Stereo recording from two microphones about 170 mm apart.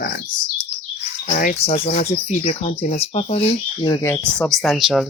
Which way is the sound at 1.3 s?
50° left (ahead or behind).